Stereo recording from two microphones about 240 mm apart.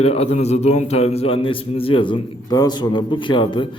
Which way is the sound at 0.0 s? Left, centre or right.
Left.